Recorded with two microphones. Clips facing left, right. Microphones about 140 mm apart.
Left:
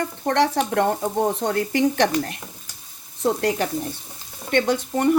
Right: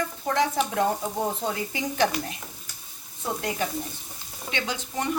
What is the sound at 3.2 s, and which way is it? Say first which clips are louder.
Speech: left 8 dB; 75° left (ahead or behind).